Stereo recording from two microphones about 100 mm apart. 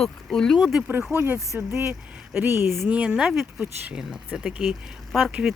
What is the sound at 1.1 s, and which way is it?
A woman's voice, 20° right (ahead or behind).